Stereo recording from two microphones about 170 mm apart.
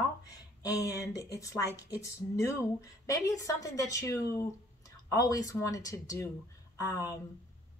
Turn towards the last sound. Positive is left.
turn(degrees=20)  # may be behind; listen again after turning